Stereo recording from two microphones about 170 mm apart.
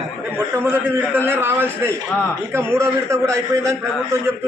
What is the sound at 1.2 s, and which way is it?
A man's voice, 15° right (ahead or behind).